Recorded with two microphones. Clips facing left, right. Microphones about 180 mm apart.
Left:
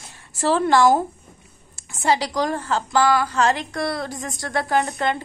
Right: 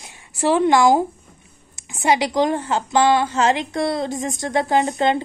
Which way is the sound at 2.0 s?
20° right (ahead or behind).